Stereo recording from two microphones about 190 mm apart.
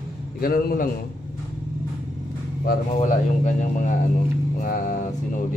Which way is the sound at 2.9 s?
40° left (ahead or behind).